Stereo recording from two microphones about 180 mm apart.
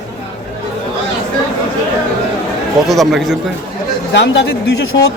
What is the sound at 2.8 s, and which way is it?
Speech, centre (ahead or behind).